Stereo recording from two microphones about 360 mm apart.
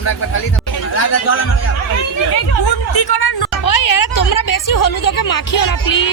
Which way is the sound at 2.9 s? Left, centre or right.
Left.